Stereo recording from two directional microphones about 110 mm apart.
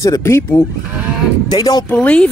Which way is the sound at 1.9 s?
10° left (ahead or behind).